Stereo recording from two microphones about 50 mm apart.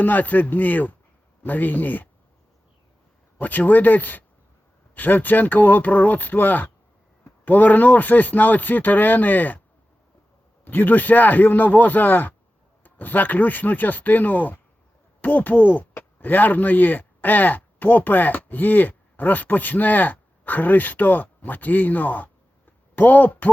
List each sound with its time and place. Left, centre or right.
0.0 s a man's voice: left
3.3 s a man's voice: left
10.7 s a man's voice: left